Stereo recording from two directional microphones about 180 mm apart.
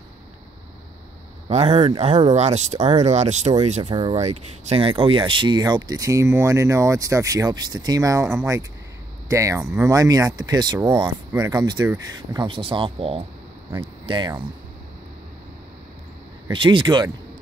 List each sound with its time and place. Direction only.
1.5 s speech: 35° right (ahead or behind)
3.9 s speech: 25° right (ahead or behind)
16.4 s speech: 25° right (ahead or behind)